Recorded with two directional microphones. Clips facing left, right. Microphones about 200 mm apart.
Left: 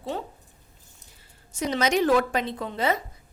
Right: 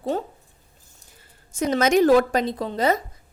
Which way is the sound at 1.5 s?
50° right (ahead or behind).